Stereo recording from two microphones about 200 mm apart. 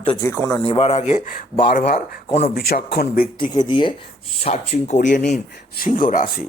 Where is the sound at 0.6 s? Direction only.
30° left (ahead or behind); by 3.3 s 50° left (ahead or behind).